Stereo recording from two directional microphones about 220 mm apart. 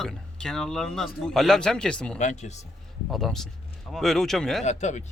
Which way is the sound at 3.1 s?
Centre (ahead or behind).